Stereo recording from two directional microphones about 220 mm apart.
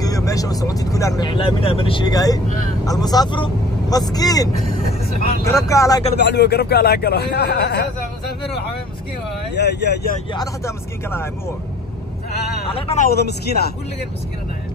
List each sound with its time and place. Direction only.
0.0 s speech: 15° left (ahead or behind)
6.1 s a man's voice: 50° left (ahead or behind)
9.6 s speech: 50° left (ahead or behind)
10.3 s speech: 15° left (ahead or behind)
12.7 s a man's voice: 30° left (ahead or behind)
13.1 s a man's voice: 45° left (ahead or behind)